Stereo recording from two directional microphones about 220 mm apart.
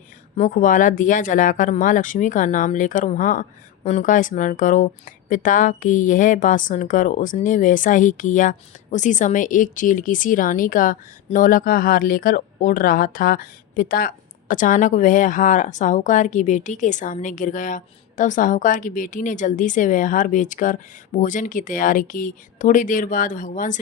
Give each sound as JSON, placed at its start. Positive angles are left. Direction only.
{"t": 0.3, "sound": "speech", "side_deg": 35}